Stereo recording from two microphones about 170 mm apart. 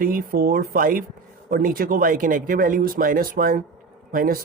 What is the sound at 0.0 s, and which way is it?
Speech, 60° right (ahead or behind).